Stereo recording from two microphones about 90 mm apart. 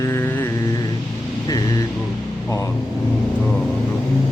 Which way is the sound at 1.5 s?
45° left (ahead or behind).